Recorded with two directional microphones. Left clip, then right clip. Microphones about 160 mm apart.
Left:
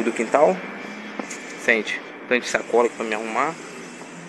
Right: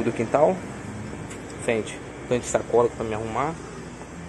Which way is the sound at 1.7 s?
5° right (ahead or behind).